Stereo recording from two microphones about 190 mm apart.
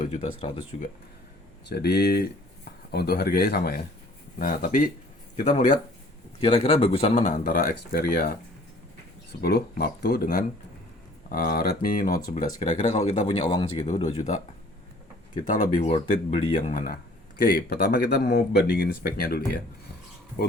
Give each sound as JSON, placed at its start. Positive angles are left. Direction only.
{"t": 0.0, "sound": "speech", "side_deg": 35}
{"t": 1.7, "sound": "speech", "side_deg": 60}
{"t": 6.4, "sound": "speech", "side_deg": 30}
{"t": 9.4, "sound": "speech", "side_deg": 55}
{"t": 12.9, "sound": "speech", "side_deg": 30}
{"t": 13.8, "sound": "speech", "side_deg": 40}